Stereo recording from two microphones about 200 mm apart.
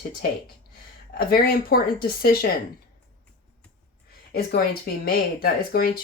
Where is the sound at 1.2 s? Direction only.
50° left (ahead or behind).